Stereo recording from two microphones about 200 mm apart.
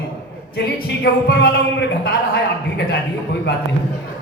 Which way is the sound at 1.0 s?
50° left (ahead or behind).